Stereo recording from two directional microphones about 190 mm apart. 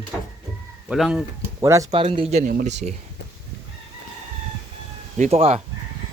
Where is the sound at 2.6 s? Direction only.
35° right (ahead or behind).